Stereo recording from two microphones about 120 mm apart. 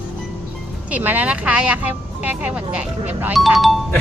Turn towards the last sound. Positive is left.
turn(degrees=0)  # may be behind; listen again after turning